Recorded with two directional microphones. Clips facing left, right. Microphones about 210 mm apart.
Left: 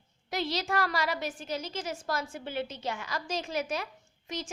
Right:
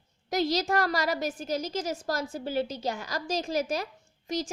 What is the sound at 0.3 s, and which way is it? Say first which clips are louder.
A woman's voice: right 5 dB; 40° right (ahead or behind).